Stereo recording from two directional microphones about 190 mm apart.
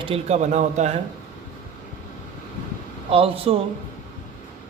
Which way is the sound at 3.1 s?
30° right (ahead or behind).